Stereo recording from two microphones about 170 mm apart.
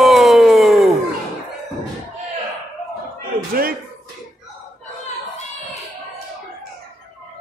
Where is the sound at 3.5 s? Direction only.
60° right (ahead or behind).